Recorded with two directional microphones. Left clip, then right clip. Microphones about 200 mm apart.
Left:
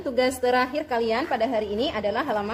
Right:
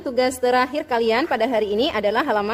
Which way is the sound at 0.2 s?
30° right (ahead or behind).